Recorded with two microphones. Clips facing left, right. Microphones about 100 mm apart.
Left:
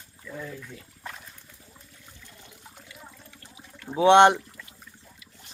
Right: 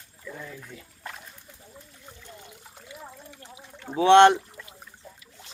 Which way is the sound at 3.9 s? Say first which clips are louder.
Right 1 dB; 15° left (ahead or behind).